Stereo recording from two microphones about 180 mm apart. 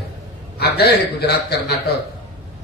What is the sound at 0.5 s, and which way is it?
Speech, 60° left (ahead or behind).